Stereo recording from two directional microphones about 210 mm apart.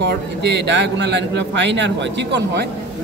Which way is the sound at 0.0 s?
55° right (ahead or behind).